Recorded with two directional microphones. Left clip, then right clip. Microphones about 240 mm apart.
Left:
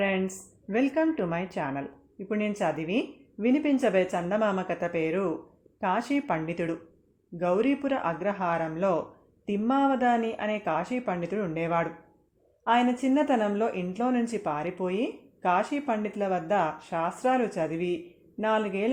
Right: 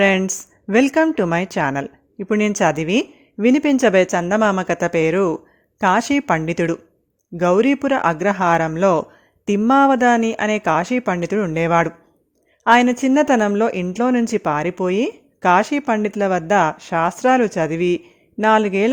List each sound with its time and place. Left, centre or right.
0.0 s speech: right